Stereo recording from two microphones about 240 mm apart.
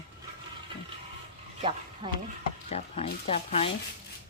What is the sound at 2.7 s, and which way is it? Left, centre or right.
Speech, left.